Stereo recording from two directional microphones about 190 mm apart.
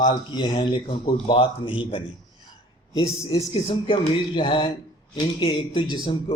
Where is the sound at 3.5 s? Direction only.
30° left (ahead or behind).